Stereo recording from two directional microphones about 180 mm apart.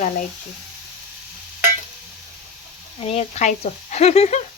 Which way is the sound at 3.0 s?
35° left (ahead or behind).